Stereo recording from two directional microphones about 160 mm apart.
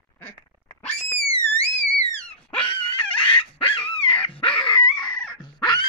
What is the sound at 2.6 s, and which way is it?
Dog, 35° left (ahead or behind).